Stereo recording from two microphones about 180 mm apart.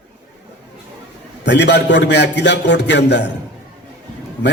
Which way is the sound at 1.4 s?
75° left (ahead or behind).